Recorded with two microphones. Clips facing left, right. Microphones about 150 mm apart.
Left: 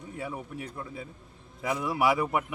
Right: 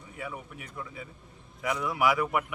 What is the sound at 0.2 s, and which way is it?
Speech, 30° left (ahead or behind).